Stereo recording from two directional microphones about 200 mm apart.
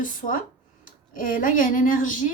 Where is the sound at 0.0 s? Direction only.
40° left (ahead or behind).